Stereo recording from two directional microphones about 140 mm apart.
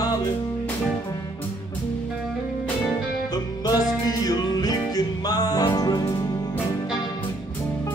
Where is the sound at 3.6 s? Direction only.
25° left (ahead or behind).